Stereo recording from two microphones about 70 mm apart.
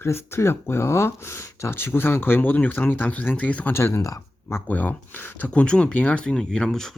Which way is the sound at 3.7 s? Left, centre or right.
Left.